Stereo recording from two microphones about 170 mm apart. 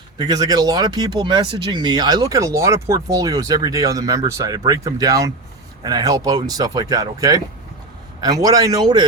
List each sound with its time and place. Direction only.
0.2 s speech: 25° right (ahead or behind)